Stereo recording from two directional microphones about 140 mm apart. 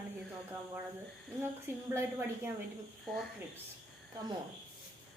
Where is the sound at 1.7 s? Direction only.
15° right (ahead or behind).